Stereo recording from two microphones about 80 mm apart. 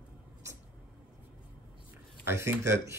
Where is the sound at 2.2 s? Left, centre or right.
Right.